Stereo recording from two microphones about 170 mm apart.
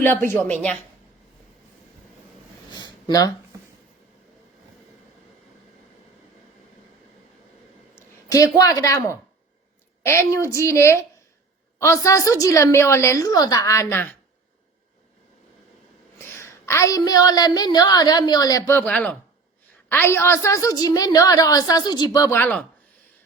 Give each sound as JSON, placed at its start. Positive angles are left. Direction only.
{"t": 0.0, "sound": "a woman's voice", "side_deg": 10}
{"t": 2.6, "sound": "a sound", "side_deg": 25}
{"t": 7.9, "sound": "a woman's voice", "side_deg": 20}
{"t": 16.1, "sound": "a woman's voice", "side_deg": 15}